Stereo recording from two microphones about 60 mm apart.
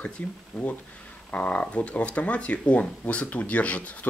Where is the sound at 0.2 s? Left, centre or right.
Left.